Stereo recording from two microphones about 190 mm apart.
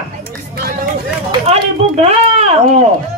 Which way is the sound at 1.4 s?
35° right (ahead or behind).